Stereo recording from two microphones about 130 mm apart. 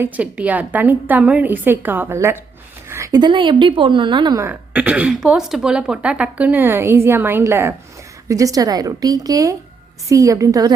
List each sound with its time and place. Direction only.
0.0 s a woman's voice: 10° right (ahead or behind); by 4.4 s 35° right (ahead or behind)
4.4 s a woman's voice: 15° right (ahead or behind)